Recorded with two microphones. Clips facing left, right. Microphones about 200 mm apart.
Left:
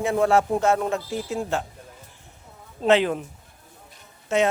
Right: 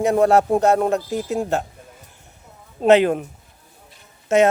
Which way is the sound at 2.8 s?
45° right (ahead or behind).